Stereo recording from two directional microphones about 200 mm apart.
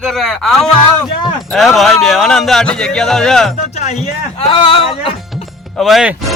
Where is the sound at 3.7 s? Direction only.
35° left (ahead or behind).